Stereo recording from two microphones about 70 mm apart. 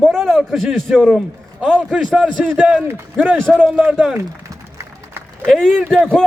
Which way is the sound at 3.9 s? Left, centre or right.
Centre.